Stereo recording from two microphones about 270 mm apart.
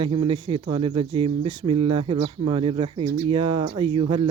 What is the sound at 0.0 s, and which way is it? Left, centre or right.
Speech, centre.